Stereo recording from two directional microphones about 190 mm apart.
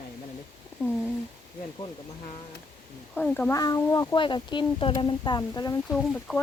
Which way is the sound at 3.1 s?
10° left (ahead or behind).